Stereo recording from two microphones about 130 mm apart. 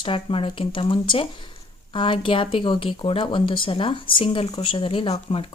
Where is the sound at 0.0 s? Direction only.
45° left (ahead or behind).